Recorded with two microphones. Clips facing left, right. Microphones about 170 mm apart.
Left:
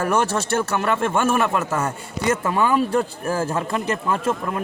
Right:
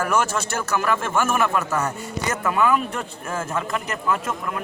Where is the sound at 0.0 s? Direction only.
30° left (ahead or behind).